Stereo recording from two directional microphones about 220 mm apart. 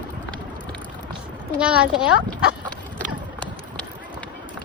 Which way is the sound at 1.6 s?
5° right (ahead or behind).